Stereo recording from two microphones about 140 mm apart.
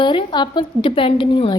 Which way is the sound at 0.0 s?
35° left (ahead or behind).